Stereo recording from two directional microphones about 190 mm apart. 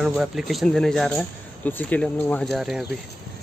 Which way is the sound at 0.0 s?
5° right (ahead or behind).